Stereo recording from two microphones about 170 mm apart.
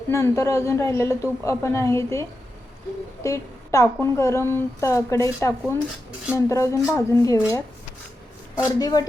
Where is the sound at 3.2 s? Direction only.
20° left (ahead or behind).